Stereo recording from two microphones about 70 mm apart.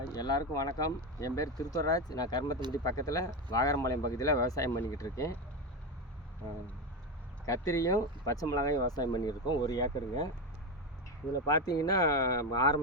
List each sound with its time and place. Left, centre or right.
0.1 s speech: left
2.7 s speech: left
7.4 s speech: left
11.4 s speech: left